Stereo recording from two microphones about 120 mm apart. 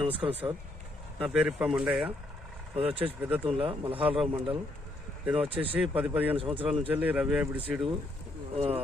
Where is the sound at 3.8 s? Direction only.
50° right (ahead or behind).